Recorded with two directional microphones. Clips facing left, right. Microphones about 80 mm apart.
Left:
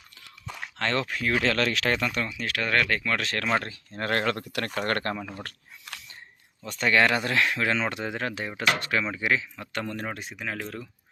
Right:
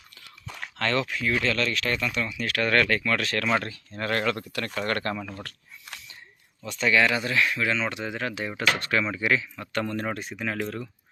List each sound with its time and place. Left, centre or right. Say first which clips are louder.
0.4 s a sound: left 1 dB; centre
0.8 s speech: right 1 dB; left
1.0 s speech: even; left
1.5 s speech: left 2 dB; left
2.2 s speech: right 3 dB; left
3.2 s speech: right 1 dB; left
6.7 s speech: even; left
8.4 s speech: right 1 dB; centre